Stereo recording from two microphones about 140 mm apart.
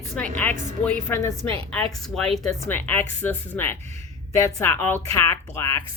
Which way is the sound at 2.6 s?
15° left (ahead or behind).